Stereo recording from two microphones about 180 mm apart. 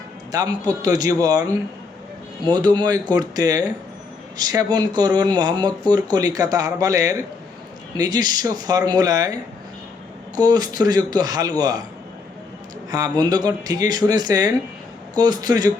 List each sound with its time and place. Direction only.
0.3 s speech: 20° right (ahead or behind)
2.5 s speech: 25° right (ahead or behind)
10.3 s speech: 20° right (ahead or behind)
12.9 s speech: 20° right (ahead or behind)